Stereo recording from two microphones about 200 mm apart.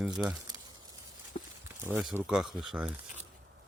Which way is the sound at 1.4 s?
30° left (ahead or behind).